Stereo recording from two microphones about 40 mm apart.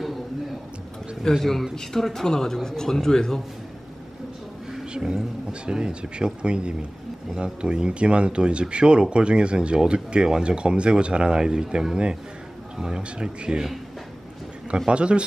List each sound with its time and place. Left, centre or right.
1.4 s a man's voice: centre
4.9 s a man's voice: right
14.9 s speech: right